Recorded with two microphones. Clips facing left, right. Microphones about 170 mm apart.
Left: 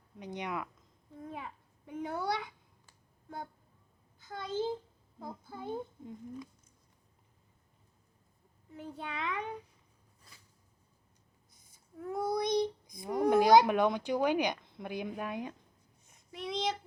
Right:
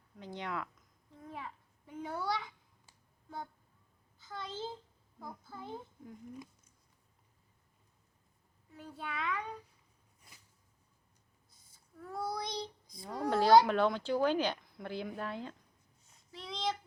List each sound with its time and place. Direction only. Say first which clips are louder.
0.2 s child singing: left 2 dB; 20° left (ahead or behind)
1.3 s a sound: left 1 dB; 15° left (ahead or behind)
2.0 s a child's voice: left 2 dB; 20° left (ahead or behind)
4.3 s child singing: left 7 dB; 15° left (ahead or behind)
5.2 s a child's voice: left 4 dB; 20° left (ahead or behind)
8.7 s a child's voice: left 2 dB; 20° left (ahead or behind)
11.5 s child singing: left 7 dB; 20° left (ahead or behind)
16.0 s a sound: left 7 dB; 20° left (ahead or behind)